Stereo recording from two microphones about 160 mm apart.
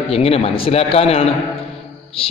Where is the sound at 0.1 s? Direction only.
35° left (ahead or behind).